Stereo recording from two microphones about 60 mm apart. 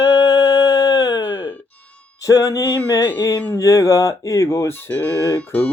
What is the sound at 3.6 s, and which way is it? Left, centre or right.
Speech, left.